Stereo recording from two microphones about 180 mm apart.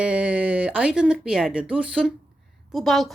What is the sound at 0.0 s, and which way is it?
Speech, 5° right (ahead or behind).